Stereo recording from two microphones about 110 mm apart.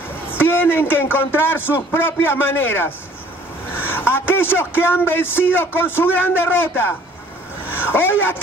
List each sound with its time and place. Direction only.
0.3 s a man's voice: 20° left (ahead or behind)